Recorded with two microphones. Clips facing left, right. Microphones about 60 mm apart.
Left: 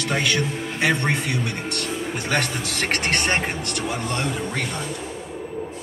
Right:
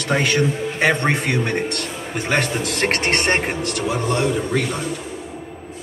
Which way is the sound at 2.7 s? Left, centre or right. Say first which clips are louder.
Right 4 dB; right.